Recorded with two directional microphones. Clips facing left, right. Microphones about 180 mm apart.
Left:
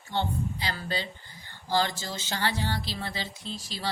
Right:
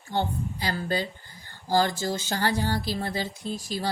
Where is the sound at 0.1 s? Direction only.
45° right (ahead or behind).